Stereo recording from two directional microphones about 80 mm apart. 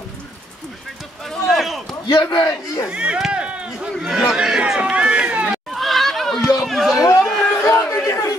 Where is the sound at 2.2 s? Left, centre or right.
Left.